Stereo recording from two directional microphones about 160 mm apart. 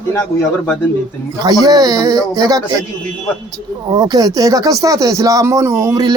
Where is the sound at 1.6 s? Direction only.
25° right (ahead or behind).